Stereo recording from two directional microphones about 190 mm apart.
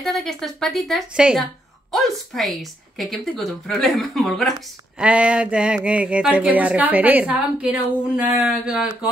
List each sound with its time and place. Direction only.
0.0 s a woman's voice: centre (ahead or behind)